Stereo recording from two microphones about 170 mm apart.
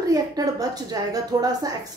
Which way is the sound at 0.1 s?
20° right (ahead or behind).